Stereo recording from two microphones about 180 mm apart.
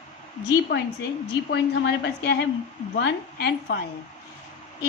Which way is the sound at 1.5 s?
70° left (ahead or behind).